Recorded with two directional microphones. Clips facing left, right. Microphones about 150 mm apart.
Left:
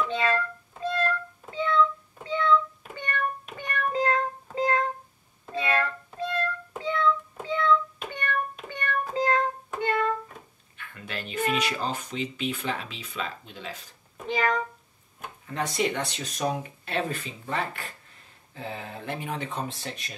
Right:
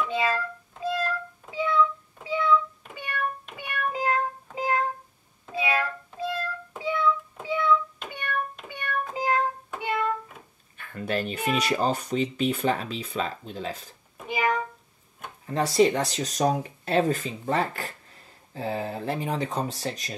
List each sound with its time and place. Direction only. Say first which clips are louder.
0.0 s music: even; 10° right (ahead or behind)
6.8 s child singing: even; 10° right (ahead or behind)
8.1 s music: left 1 dB; 5° right (ahead or behind)
10.8 s a sound: right 9 dB; 40° right (ahead or behind)
11.5 s speech: right 4 dB; 40° right (ahead or behind)
14.1 s a sound: even; 10° right (ahead or behind)
15.4 s speech: right 7 dB; 35° right (ahead or behind)